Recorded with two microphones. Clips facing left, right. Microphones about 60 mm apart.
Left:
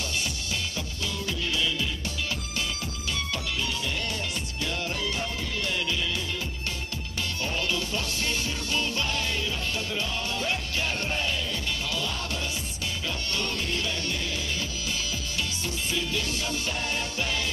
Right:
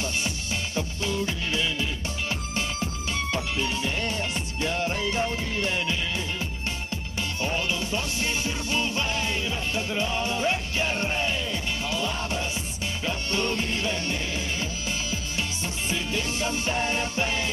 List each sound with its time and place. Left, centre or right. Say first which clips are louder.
0.7 s music: right 5 dB; right
7.4 s music: right 2 dB; right
13.0 s music: right 5 dB; right
15.9 s music: right 2 dB; right